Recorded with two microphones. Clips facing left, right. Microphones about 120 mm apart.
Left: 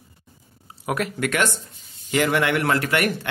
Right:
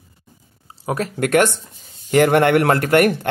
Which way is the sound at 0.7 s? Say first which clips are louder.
Right 2 dB; 30° right (ahead or behind).